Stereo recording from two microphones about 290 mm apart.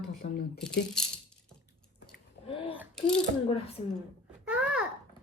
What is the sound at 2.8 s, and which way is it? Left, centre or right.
Speech, centre.